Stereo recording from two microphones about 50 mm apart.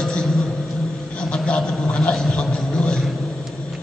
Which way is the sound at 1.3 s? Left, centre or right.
Centre.